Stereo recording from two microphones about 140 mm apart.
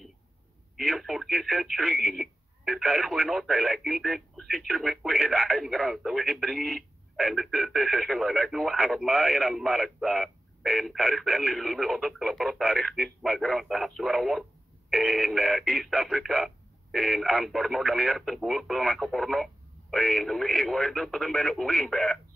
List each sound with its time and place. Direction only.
0.7 s speech: centre (ahead or behind)